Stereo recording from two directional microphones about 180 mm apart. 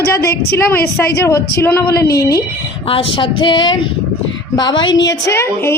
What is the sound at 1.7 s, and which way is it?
Speech, 60° left (ahead or behind).